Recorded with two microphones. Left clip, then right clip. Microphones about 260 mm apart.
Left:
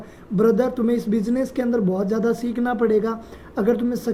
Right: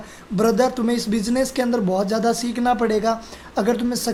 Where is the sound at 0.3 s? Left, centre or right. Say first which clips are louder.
Even; centre.